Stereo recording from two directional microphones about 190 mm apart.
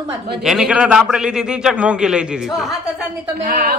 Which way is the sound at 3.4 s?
55° right (ahead or behind).